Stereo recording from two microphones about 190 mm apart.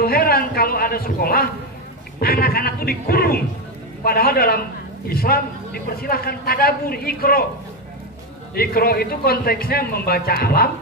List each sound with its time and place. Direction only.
0.0 s a man's voice: 50° left (ahead or behind)
8.5 s a man's voice: 50° left (ahead or behind)